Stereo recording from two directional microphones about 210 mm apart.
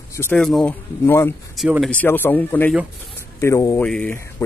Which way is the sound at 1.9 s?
10° left (ahead or behind).